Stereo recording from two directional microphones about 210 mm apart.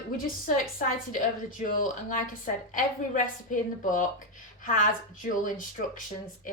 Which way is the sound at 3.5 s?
40° left (ahead or behind).